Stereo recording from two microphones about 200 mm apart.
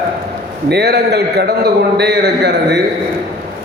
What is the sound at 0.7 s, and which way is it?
A man's voice, 55° right (ahead or behind).